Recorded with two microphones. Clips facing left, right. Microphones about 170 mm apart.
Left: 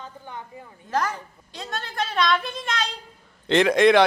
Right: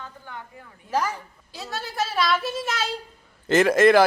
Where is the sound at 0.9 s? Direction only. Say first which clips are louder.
Even; 10° right (ahead or behind).